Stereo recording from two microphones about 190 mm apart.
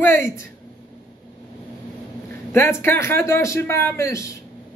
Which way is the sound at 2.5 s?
15° left (ahead or behind).